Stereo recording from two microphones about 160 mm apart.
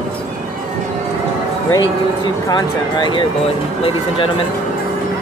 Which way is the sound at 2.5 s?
25° left (ahead or behind).